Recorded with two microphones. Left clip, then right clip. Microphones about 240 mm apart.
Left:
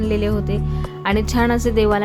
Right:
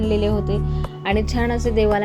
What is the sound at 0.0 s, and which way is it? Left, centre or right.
A woman's voice, centre.